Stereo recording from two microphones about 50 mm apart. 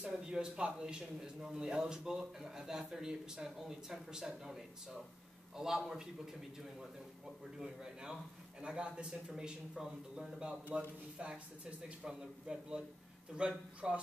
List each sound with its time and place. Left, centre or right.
0.0 s a man's voice: centre
7.5 s a man's voice: centre
12.0 s a man's voice: centre